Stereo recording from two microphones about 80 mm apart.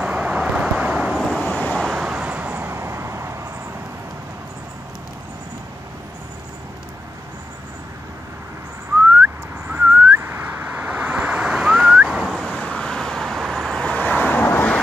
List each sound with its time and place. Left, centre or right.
0.0 s vehicle: centre
0.9 s vehicle: centre
1.4 s vehicle: centre
1.7 s vehicle: centre; by 3.3 s right
9.1 s whistling: right; by 14.8 s left